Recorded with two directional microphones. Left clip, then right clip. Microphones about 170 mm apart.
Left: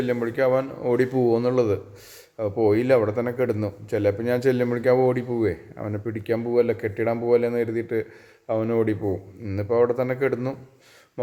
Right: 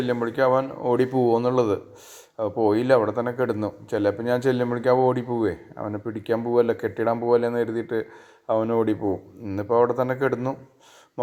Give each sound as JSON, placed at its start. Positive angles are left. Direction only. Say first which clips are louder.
{"t": 0.0, "sound": "a man's voice", "louder": "right 1 dB", "side_deg": 0}
{"t": 6.4, "sound": "a man's voice", "louder": "even", "side_deg": -5}